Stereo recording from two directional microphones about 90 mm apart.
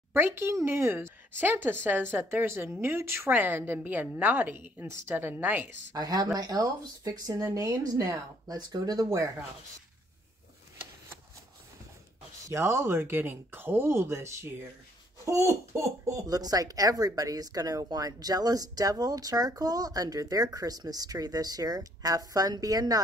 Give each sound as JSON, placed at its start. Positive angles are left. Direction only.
{"t": 0.1, "sound": "speech", "side_deg": -25}
{"t": 5.9, "sound": "speech", "side_deg": -45}
{"t": 12.4, "sound": "speech", "side_deg": -30}